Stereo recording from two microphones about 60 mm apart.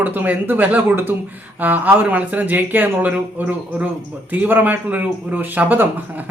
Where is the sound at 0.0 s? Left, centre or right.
Right.